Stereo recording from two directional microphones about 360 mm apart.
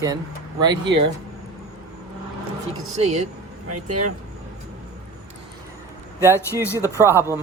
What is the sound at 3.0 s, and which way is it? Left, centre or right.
Speech, centre.